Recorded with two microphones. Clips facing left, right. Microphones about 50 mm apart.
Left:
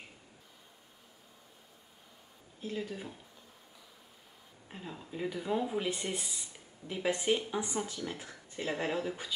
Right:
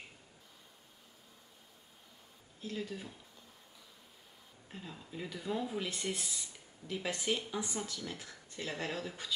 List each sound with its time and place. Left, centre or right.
2.6 s speech: centre
4.6 s speech: centre